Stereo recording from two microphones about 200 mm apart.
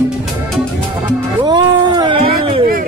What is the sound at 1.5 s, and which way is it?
Cat, 20° right (ahead or behind).